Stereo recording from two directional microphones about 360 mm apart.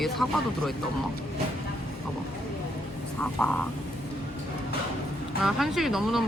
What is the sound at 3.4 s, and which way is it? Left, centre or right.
Speech, centre.